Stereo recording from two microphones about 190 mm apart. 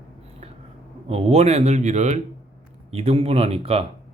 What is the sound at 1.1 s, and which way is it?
Speech, 30° right (ahead or behind).